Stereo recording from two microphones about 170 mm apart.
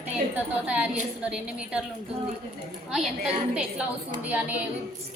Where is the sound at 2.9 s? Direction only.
5° right (ahead or behind).